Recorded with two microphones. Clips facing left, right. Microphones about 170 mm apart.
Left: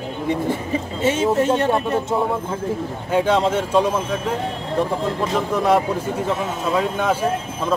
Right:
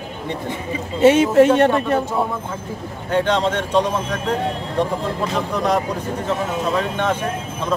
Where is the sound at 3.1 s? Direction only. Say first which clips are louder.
Left 1 dB; 5° left (ahead or behind).